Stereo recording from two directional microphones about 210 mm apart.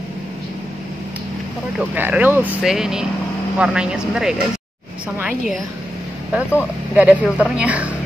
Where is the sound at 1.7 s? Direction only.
5° right (ahead or behind).